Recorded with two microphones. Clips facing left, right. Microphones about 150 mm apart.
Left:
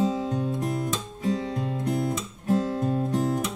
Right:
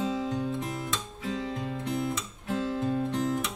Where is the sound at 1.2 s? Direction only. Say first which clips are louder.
Left 6 dB; 40° left (ahead or behind).